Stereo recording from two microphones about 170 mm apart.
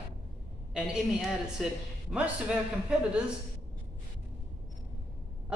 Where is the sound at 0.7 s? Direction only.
5° right (ahead or behind).